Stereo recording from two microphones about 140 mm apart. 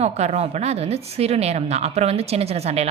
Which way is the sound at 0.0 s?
50° right (ahead or behind).